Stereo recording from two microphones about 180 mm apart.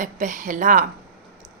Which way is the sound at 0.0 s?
45° right (ahead or behind).